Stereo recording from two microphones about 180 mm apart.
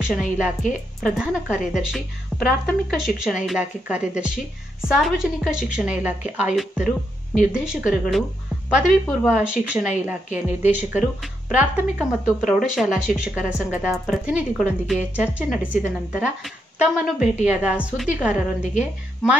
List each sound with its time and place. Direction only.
0.0 s a woman's voice: 5° right (ahead or behind)